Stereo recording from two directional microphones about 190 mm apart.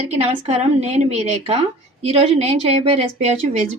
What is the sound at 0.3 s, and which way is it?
A woman's voice, 35° right (ahead or behind).